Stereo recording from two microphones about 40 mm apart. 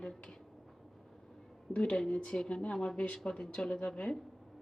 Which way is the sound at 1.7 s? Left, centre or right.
Left.